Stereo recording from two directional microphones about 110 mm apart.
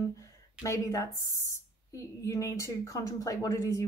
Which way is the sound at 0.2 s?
30° left (ahead or behind).